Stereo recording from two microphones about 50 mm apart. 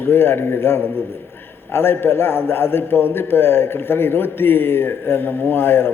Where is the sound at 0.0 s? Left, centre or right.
Left.